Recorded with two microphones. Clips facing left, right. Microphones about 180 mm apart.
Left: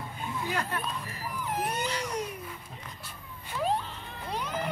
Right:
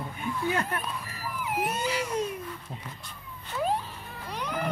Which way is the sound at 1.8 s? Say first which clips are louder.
Right 3 dB; 10° right (ahead or behind).